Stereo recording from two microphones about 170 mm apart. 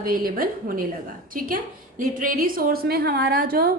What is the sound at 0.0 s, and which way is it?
A woman's voice, 55° right (ahead or behind).